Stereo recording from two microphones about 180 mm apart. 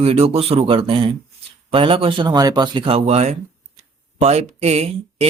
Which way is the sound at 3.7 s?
35° right (ahead or behind).